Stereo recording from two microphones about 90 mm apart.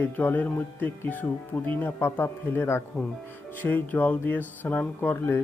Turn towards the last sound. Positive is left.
turn(degrees=25)  # may be behind; listen again after turning